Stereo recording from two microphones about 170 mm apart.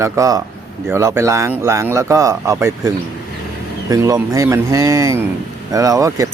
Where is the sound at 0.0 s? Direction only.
20° right (ahead or behind).